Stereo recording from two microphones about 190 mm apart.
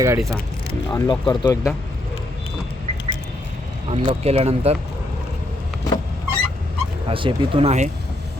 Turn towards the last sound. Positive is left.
turn(degrees=-35)  # may be behind; listen again after turning